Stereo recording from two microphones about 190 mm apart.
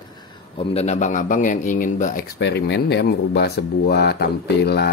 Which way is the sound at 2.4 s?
60° left (ahead or behind).